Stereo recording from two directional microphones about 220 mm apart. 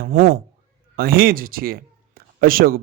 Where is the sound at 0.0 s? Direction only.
40° right (ahead or behind).